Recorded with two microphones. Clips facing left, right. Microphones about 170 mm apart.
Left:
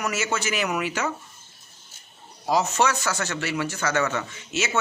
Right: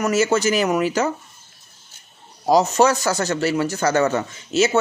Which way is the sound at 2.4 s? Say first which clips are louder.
Right 7 dB; 40° right (ahead or behind).